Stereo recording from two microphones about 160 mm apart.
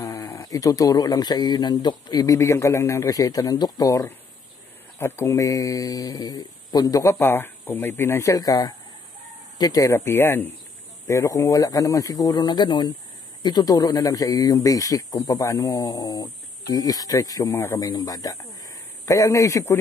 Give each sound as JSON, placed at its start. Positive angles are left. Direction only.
{"t": 0.0, "sound": "speech", "side_deg": 20}